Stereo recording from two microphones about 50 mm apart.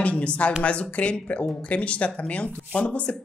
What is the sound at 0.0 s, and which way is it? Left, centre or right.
Speech, left.